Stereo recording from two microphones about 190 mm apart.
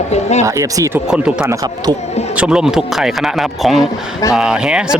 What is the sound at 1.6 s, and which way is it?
Speech, 20° right (ahead or behind).